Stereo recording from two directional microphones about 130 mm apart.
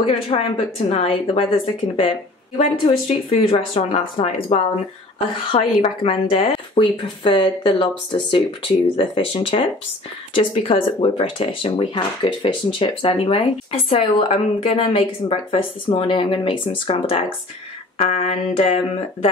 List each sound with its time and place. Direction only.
0.0 s speech: 45° left (ahead or behind)